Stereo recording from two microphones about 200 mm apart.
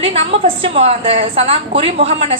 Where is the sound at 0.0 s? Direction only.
30° right (ahead or behind).